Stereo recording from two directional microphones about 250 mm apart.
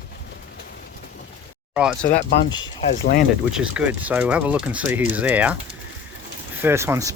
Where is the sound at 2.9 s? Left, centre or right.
Left.